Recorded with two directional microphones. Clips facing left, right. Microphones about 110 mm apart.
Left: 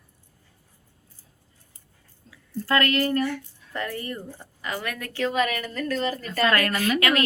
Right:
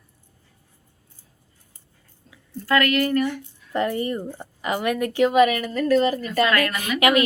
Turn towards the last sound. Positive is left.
turn(degrees=-20)  # may be behind; listen again after turning